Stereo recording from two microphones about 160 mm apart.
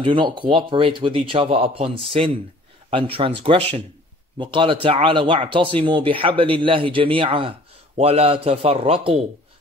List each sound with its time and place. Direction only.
0.0 s speech: 30° right (ahead or behind)